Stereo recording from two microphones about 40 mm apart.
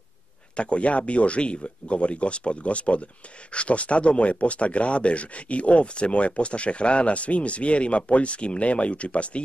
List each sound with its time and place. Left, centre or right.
0.6 s speech: left